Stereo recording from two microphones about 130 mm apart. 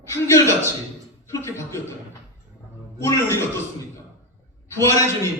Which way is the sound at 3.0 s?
20° left (ahead or behind).